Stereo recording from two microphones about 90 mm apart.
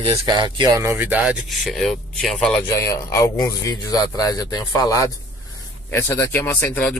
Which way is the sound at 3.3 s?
45° left (ahead or behind).